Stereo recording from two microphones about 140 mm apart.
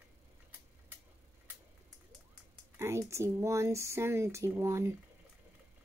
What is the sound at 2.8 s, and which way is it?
Speech, 20° right (ahead or behind).